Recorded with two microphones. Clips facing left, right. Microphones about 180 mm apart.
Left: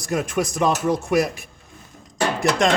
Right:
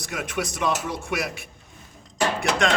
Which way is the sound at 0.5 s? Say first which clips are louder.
Left 7 dB; 40° left (ahead or behind).